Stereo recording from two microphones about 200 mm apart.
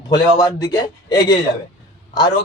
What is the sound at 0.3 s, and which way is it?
A man's voice, 15° left (ahead or behind).